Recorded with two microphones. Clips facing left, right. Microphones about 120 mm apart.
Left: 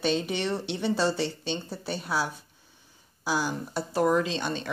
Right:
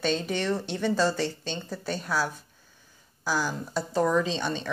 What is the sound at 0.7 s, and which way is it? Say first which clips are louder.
Speech: even; 50° right (ahead or behind).